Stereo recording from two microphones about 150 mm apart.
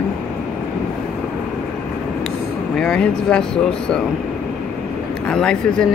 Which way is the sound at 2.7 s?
5° left (ahead or behind).